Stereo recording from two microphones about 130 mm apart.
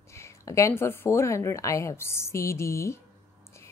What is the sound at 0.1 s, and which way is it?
Speech, 20° left (ahead or behind).